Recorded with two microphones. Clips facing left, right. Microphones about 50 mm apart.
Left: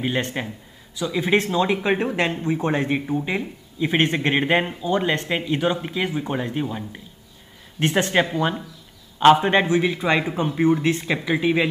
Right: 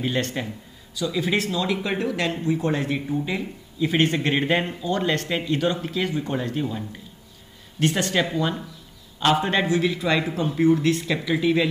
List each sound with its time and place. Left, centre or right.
0.0 s speech: centre